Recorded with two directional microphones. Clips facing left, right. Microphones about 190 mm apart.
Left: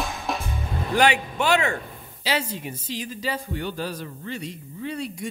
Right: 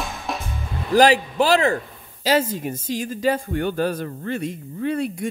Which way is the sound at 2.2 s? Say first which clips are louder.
Right 7 dB; 45° right (ahead or behind).